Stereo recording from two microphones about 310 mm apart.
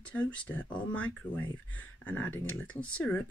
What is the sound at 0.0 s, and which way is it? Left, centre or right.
Speech, centre.